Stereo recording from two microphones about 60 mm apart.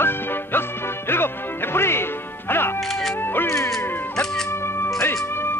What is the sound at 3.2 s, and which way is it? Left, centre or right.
Music, left.